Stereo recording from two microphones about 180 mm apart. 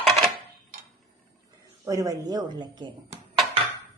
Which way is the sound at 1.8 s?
20° right (ahead or behind).